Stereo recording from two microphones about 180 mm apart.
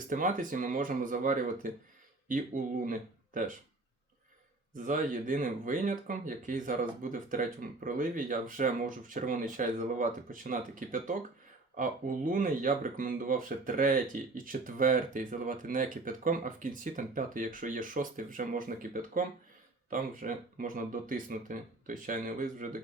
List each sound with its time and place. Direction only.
0.1 s speech: 45° right (ahead or behind)
4.7 s speech: 45° right (ahead or behind)